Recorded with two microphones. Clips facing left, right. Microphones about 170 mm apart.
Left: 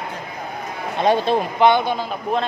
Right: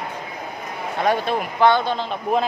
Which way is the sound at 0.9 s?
25° left (ahead or behind).